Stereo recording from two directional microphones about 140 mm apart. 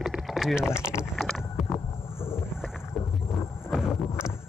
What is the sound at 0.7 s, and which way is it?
Speech, 20° left (ahead or behind).